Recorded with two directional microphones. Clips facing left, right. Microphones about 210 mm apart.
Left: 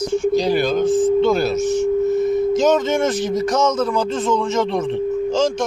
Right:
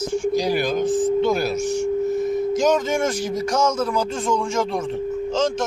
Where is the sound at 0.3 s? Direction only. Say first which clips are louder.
Left 3 dB; 10° right (ahead or behind).